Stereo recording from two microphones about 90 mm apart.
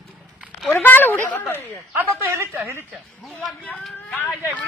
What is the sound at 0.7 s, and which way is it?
Speech, 20° left (ahead or behind).